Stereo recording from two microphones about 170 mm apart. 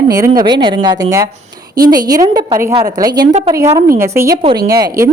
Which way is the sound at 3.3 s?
40° right (ahead or behind).